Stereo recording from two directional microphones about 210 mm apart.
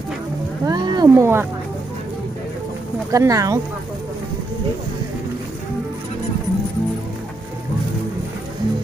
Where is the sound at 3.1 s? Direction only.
15° right (ahead or behind).